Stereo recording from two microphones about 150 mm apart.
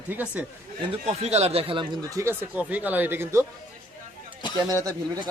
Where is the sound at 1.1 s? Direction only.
45° right (ahead or behind).